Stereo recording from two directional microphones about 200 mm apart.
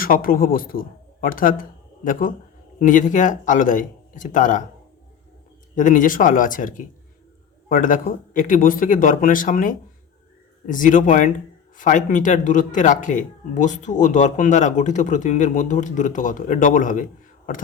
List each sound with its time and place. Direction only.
0.0 s speech: 45° left (ahead or behind)
5.7 s speech: 40° left (ahead or behind)